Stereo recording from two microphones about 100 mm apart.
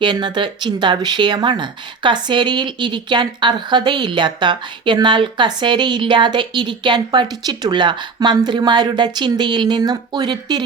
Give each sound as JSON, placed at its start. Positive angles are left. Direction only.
{"t": 0.0, "sound": "speech", "side_deg": -50}